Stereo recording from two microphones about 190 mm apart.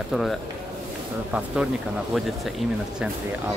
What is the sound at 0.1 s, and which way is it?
Speech, centre (ahead or behind).